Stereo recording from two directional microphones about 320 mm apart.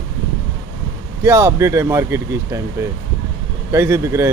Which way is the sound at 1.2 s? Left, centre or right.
Centre.